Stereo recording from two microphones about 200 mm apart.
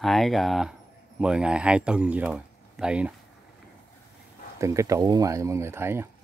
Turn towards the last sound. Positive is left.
turn(degrees=-10)  # may be behind; listen again after turning